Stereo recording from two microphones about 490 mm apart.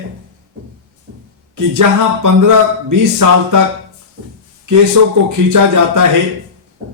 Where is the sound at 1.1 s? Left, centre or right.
Right.